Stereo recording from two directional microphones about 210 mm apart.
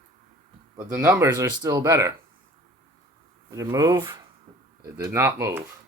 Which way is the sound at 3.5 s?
15° right (ahead or behind).